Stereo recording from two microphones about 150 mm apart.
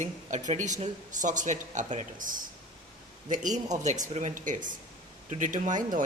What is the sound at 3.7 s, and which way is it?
Speech, 55° right (ahead or behind).